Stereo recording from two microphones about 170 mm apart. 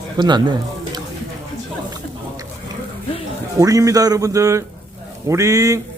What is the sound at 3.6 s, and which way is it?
A man's voice, 20° right (ahead or behind).